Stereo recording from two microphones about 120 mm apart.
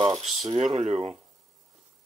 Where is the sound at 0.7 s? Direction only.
60° right (ahead or behind).